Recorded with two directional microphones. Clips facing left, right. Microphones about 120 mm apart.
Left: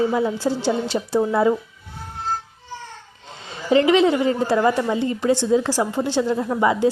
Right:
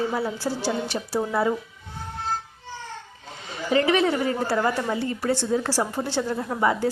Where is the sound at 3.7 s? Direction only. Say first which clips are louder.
Left 5 dB; 20° left (ahead or behind).